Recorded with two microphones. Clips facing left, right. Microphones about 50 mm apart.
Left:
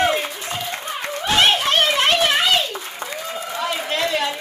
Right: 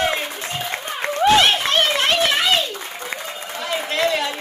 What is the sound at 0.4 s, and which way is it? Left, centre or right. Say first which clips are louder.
Applause: right 1 dB; right.